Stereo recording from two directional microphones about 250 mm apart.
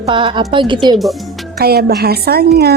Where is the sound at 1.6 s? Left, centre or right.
Right.